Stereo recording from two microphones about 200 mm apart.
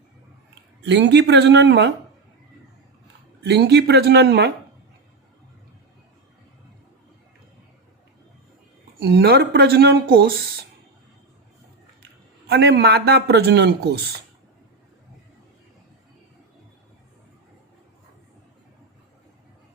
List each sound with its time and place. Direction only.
0.9 s speech: 60° right (ahead or behind)
3.4 s speech: 55° right (ahead or behind)
9.0 s a man's voice: 55° right (ahead or behind)
12.5 s a man's voice: 55° right (ahead or behind)